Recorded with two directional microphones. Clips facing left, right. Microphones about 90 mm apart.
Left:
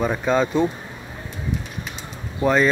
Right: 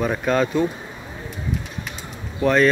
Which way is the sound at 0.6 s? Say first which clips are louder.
Left 1 dB; 30° left (ahead or behind).